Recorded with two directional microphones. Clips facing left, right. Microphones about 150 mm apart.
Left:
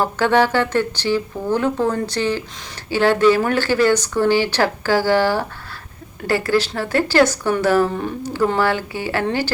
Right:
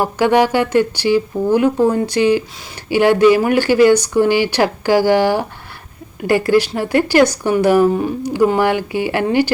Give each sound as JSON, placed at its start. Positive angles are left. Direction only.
{"t": 0.0, "sound": "speech", "side_deg": -15}